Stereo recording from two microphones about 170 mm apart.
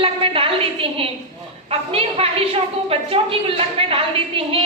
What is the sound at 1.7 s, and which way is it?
A woman's voice, 35° right (ahead or behind).